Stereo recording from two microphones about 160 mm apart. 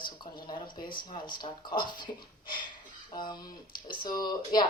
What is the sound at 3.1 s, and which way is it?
Speech, 25° left (ahead or behind).